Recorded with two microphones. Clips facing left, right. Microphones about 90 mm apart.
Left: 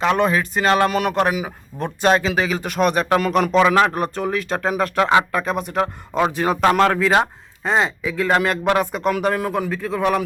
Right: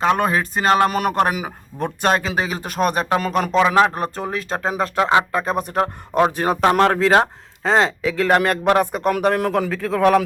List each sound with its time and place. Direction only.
0.0 s speech: 40° right (ahead or behind)
6.6 s speech: 30° right (ahead or behind)
7.6 s speech: 90° right
8.3 s speech: 50° right (ahead or behind); by 10.2 s 85° right